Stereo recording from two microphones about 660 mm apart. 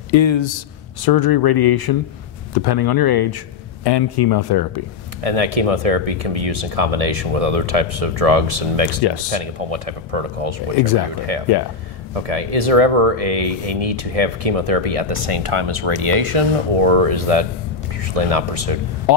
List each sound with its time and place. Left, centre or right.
0.1 s speech: left
5.2 s speech: right
12.1 s speech: right